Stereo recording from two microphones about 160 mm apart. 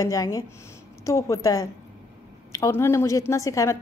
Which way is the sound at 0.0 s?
20° left (ahead or behind).